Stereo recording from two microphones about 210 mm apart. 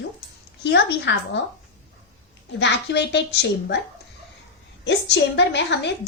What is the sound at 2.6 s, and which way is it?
A woman's voice, 55° left (ahead or behind).